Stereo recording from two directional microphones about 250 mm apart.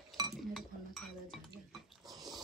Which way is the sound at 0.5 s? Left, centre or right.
Centre.